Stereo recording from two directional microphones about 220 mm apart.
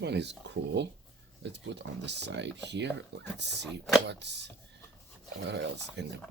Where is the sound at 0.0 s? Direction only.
50° right (ahead or behind).